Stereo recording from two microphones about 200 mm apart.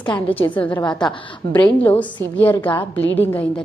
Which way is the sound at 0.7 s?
20° left (ahead or behind).